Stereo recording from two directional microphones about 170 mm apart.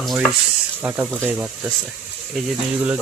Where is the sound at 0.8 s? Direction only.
10° right (ahead or behind).